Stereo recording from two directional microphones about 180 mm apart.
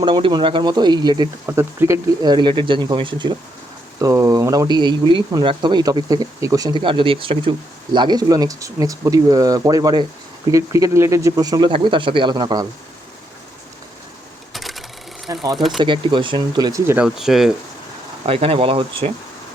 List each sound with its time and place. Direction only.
0.0 s speech: 25° right (ahead or behind)
14.5 s a sound: centre (ahead or behind)
15.5 s speech: centre (ahead or behind)
15.8 s speech: 25° right (ahead or behind); by 17.5 s centre (ahead or behind)
18.3 s speech: 30° right (ahead or behind)